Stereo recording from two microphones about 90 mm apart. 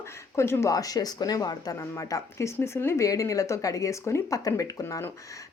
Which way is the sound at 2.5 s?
30° left (ahead or behind).